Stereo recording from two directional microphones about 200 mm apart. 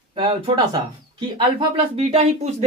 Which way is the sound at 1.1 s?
25° right (ahead or behind).